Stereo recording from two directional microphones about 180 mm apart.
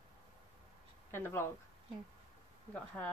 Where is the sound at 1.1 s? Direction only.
15° left (ahead or behind).